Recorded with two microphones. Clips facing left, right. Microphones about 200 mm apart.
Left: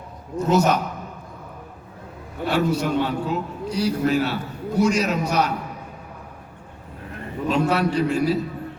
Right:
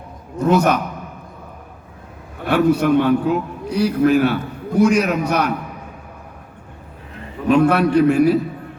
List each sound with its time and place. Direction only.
0.3 s a man's voice: 60° right (ahead or behind)
2.4 s a man's voice: 60° right (ahead or behind)
7.4 s a man's voice: 60° right (ahead or behind)